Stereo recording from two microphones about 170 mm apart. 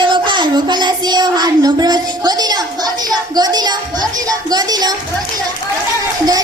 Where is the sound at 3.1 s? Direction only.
25° right (ahead or behind).